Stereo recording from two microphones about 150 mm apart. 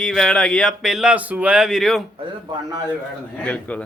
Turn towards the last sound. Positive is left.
turn(degrees=10)  # may be behind; listen again after turning